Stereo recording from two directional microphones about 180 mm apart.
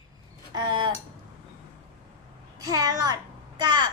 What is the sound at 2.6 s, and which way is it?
A child's voice, 20° right (ahead or behind).